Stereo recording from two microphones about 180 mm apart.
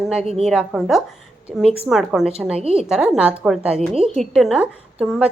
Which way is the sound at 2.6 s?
35° right (ahead or behind).